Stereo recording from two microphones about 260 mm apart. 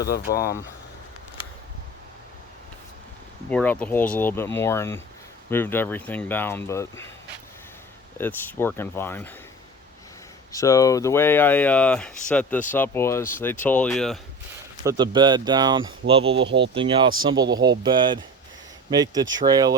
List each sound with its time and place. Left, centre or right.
0.3 s speech: left
3.5 s speech: centre
8.2 s speech: centre
10.5 s speech: centre
14.8 s speech: centre
16.5 s speech: right
16.7 s speech: centre